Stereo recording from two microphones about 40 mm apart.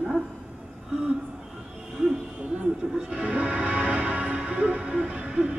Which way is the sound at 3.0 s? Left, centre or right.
Right.